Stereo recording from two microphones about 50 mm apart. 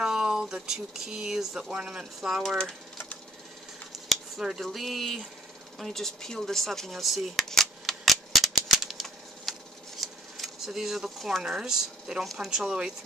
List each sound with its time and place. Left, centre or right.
0.0 s speech: centre
1.7 s speech: centre
3.9 s speech: centre
7.4 s typewriter: centre
10.7 s speech: centre